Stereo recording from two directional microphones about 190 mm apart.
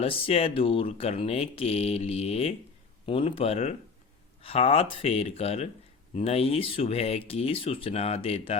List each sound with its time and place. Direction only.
0.0 s speech: 30° left (ahead or behind)